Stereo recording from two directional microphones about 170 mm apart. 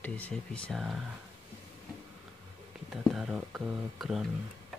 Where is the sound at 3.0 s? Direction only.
Centre (ahead or behind).